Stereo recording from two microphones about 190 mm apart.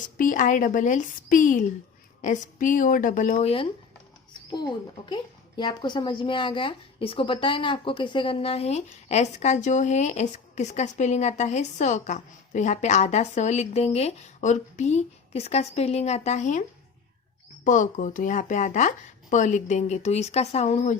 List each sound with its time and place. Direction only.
0.0 s a woman's voice: 45° left (ahead or behind)
3.3 s a child's voice: 30° left (ahead or behind)